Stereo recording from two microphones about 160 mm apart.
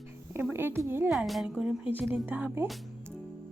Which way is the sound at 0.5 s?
15° right (ahead or behind).